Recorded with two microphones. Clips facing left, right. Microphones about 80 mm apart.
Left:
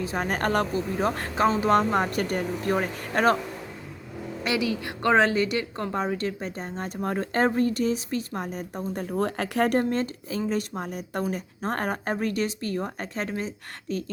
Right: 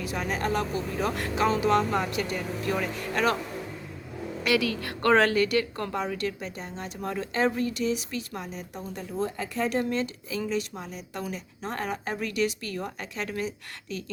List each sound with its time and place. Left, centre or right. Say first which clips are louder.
0.0 s speech: left 3 dB; left
0.3 s speech: left 3 dB; left
0.7 s speech: left 3 dB; left
4.4 s a woman's voice: right 1 dB; centre; by 14.0 s left